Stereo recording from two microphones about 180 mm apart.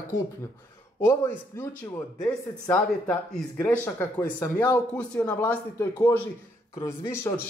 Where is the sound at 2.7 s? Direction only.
5° left (ahead or behind).